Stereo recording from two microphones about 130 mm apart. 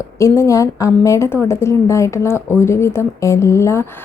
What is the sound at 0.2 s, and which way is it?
Speech, 20° left (ahead or behind).